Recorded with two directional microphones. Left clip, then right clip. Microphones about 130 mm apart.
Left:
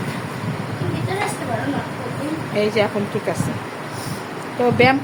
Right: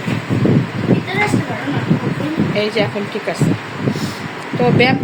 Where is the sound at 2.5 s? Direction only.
Centre (ahead or behind).